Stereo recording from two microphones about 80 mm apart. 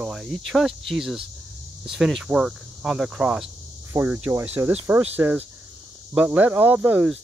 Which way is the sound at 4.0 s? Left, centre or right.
Right.